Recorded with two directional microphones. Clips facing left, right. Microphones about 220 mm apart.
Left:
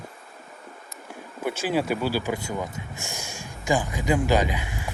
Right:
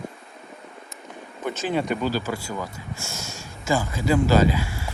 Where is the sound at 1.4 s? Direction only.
10° left (ahead or behind).